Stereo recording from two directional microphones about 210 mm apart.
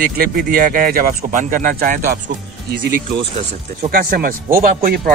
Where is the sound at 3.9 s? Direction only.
45° right (ahead or behind).